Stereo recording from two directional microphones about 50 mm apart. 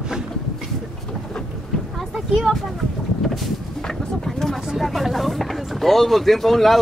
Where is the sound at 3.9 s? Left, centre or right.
Centre.